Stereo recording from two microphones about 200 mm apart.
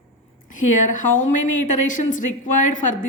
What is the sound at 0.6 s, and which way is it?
Speech, 40° left (ahead or behind).